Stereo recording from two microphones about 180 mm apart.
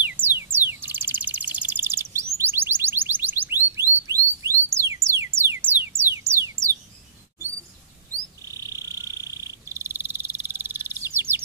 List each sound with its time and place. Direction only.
0.0 s bird: 10° right (ahead or behind)
4.1 s music: 15° right (ahead or behind)
5.9 s a sound: 15° right (ahead or behind)
8.1 s frog: 20° right (ahead or behind)